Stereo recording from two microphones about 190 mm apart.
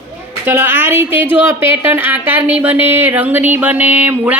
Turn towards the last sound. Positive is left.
turn(degrees=-10)  # may be behind; listen again after turning